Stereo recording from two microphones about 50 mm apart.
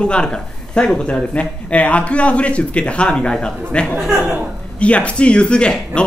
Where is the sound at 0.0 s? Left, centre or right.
Centre.